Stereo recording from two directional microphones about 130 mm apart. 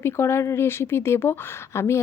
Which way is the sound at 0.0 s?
20° left (ahead or behind).